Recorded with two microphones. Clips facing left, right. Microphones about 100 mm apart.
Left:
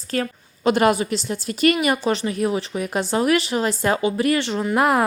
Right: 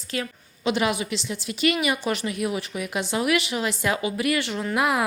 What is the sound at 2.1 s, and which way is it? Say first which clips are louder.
A woman's voice: left 5 dB; 30° left (ahead or behind).